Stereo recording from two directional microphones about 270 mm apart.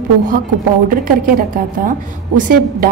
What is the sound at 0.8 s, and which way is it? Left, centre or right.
A woman's voice, right.